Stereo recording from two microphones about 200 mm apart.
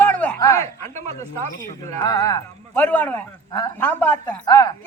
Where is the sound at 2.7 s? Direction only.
5° left (ahead or behind).